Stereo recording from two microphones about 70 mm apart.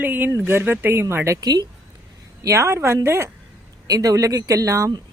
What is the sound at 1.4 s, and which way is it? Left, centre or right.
Speech, right.